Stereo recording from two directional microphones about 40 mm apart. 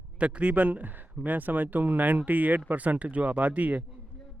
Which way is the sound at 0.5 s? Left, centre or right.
Right.